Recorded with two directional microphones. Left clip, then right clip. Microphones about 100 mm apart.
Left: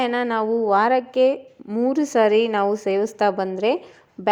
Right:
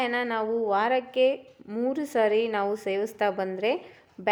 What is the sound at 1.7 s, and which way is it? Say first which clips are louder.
A woman's voice: left 7 dB; 30° left (ahead or behind).